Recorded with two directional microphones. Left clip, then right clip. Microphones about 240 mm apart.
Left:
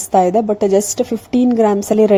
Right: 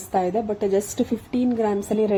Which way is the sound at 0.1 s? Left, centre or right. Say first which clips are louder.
Left 10 dB; left.